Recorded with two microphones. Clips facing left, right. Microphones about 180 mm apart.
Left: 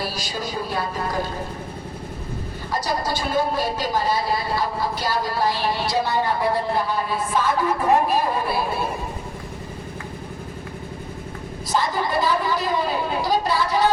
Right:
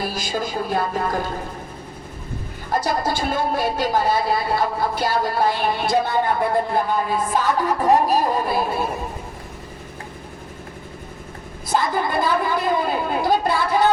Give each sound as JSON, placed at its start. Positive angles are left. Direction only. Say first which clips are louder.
{"t": 0.0, "sound": "speech", "louder": "right 3 dB", "side_deg": -50}
{"t": 2.6, "sound": "speech", "louder": "right 3 dB", "side_deg": -50}
{"t": 11.7, "sound": "speech", "louder": "right 2 dB", "side_deg": -55}